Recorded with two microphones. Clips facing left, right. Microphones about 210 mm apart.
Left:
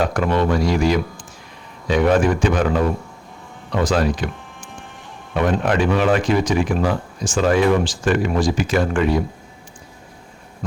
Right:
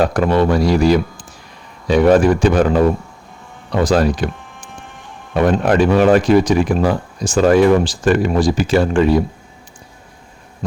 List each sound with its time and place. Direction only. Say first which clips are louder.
0.0 s speech: right 4 dB; 35° right (ahead or behind)